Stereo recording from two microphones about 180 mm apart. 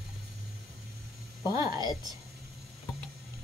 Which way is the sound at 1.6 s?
20° right (ahead or behind).